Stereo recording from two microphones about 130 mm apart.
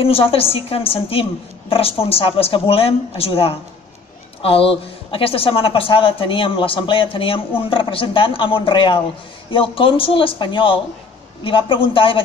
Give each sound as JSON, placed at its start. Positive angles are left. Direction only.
{"t": 0.0, "sound": "a man's voice", "side_deg": 45}